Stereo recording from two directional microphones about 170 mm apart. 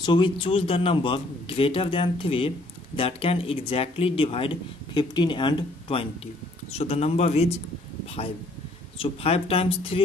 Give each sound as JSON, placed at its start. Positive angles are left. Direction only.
{"t": 0.0, "sound": "speech", "side_deg": 25}